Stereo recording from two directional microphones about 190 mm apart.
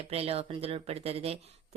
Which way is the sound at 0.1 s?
30° right (ahead or behind).